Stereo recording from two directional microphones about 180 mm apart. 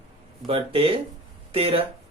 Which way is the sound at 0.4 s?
30° right (ahead or behind).